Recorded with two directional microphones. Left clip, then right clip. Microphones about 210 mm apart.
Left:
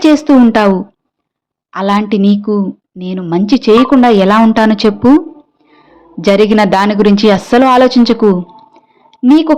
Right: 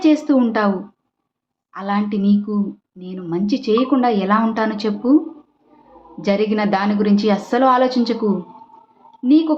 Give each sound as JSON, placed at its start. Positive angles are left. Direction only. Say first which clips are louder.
{"t": 0.0, "sound": "speech", "louder": "left 8 dB", "side_deg": 45}
{"t": 1.7, "sound": "speech", "louder": "left 10 dB", "side_deg": 45}
{"t": 6.2, "sound": "a woman's voice", "louder": "left 10 dB", "side_deg": 45}